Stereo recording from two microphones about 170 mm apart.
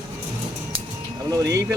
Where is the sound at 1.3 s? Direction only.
20° right (ahead or behind).